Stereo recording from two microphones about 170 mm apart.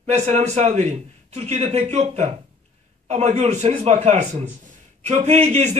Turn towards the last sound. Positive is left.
turn(degrees=-40)  # may be behind; listen again after turning